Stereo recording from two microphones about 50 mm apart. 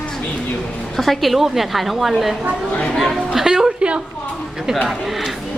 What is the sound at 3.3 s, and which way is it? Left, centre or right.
Music, centre.